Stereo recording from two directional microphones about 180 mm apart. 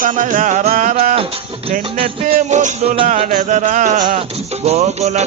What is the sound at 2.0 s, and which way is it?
Music, 35° right (ahead or behind).